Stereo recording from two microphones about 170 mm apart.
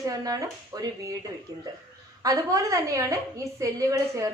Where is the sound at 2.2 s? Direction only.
20° right (ahead or behind).